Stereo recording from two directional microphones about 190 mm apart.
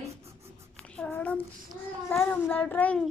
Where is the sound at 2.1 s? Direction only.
10° left (ahead or behind).